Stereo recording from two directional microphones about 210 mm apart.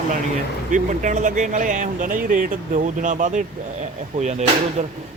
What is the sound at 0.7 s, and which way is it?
Speech, 35° right (ahead or behind).